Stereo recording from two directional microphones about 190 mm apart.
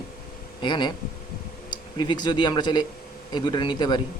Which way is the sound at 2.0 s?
20° left (ahead or behind).